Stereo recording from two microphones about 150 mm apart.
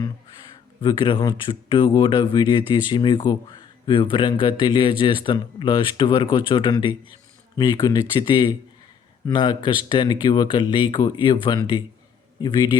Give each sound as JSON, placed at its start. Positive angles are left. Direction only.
{"t": 0.8, "sound": "a man's voice", "side_deg": 35}